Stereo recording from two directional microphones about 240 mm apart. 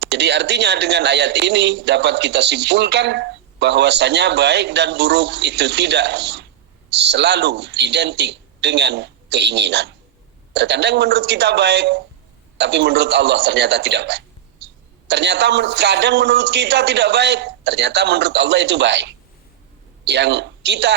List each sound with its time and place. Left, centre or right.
0.0 s speech: right